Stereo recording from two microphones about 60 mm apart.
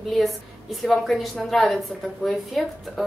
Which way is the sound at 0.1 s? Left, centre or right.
Centre.